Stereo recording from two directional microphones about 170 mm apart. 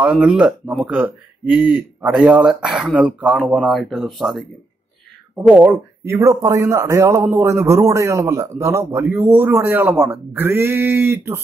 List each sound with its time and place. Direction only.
0.0 s speech: 5° right (ahead or behind)